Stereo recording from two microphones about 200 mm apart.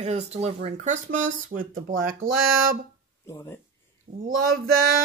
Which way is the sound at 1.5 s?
45° right (ahead or behind).